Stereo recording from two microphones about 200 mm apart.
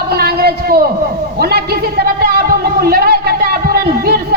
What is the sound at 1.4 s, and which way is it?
A man's voice, 50° right (ahead or behind).